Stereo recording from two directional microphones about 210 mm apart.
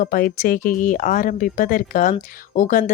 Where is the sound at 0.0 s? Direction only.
40° left (ahead or behind).